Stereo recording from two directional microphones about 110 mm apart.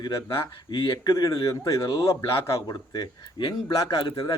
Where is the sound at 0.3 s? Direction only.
50° left (ahead or behind).